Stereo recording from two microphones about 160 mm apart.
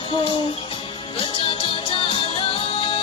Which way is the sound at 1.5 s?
35° left (ahead or behind).